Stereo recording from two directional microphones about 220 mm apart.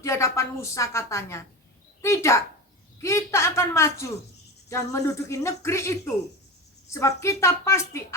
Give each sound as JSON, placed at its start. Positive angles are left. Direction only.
{"t": 0.0, "sound": "a woman's voice", "side_deg": 15}
{"t": 2.0, "sound": "a sound", "side_deg": 15}
{"t": 3.0, "sound": "a woman's voice", "side_deg": 10}